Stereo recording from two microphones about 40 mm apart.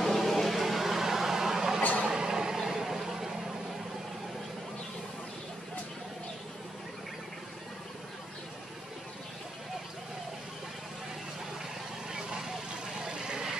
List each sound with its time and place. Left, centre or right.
0.0 s a sound: centre
2.0 s vehicle: centre
12.1 s vehicle: centre